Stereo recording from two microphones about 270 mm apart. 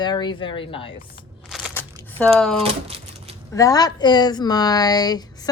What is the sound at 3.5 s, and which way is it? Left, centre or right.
Speech, centre.